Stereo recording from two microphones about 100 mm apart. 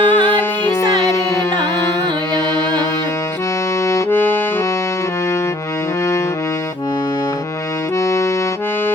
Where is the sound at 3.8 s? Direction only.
25° left (ahead or behind).